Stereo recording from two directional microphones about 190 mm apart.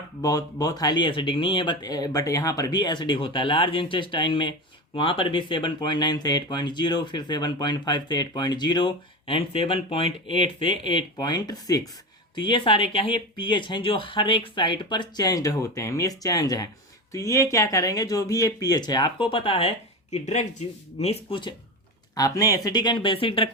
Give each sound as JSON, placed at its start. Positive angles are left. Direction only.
{"t": 0.2, "sound": "speech", "side_deg": 20}